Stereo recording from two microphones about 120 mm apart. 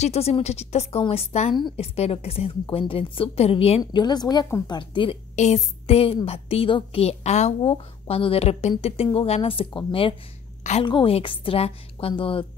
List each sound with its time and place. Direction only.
0.0 s a woman's voice: 60° left (ahead or behind)
3.8 s a woman's voice: 35° left (ahead or behind)
5.3 s a woman's voice: 75° left (ahead or behind)
7.6 s speech: 50° left (ahead or behind)